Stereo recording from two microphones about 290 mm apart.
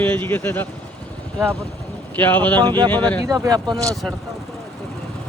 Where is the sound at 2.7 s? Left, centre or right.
Centre.